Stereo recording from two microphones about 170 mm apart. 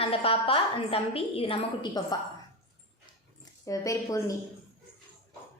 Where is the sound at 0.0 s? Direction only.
35° left (ahead or behind).